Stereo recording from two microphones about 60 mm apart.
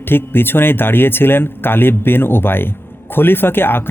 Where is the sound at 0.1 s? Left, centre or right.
Left.